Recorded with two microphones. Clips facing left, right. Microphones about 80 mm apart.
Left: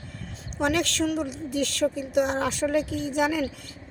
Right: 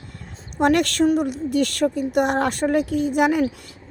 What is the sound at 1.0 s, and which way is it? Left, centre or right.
Speech, right.